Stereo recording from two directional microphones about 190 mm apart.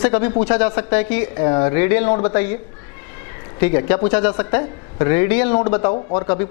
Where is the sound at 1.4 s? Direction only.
20° left (ahead or behind).